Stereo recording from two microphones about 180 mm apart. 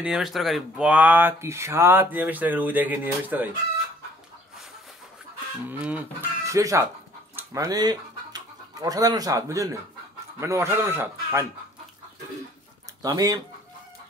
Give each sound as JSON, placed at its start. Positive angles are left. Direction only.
{"t": 0.0, "sound": "speech", "side_deg": -5}
{"t": 5.7, "sound": "speech", "side_deg": -10}
{"t": 13.0, "sound": "speech", "side_deg": -20}